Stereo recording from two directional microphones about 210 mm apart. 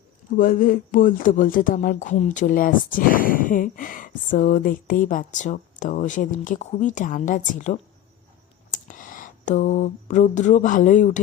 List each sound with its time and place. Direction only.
0.3 s speech: 40° left (ahead or behind)